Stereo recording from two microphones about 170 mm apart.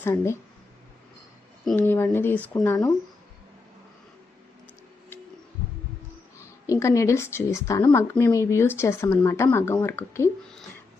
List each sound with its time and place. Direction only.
0.0 s speech: 15° left (ahead or behind)
1.7 s speech: 10° left (ahead or behind)
2.6 s speech: 20° left (ahead or behind)
6.4 s a woman's voice: 15° left (ahead or behind)